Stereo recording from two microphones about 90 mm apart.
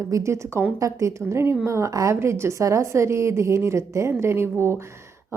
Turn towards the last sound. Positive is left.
turn(degrees=-30)  # may be behind; listen again after turning